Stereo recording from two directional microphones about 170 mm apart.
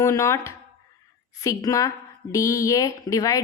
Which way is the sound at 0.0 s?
15° left (ahead or behind).